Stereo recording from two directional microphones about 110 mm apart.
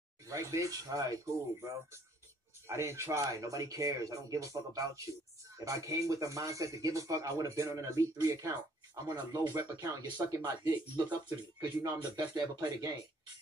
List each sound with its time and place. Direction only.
0.3 s speech: 30° right (ahead or behind)
2.7 s speech: 25° right (ahead or behind)